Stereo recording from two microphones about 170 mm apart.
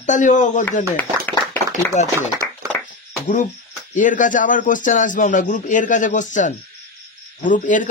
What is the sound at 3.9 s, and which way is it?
Speech, 50° left (ahead or behind).